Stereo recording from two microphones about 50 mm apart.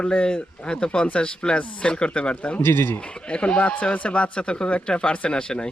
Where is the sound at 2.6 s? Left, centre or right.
Left.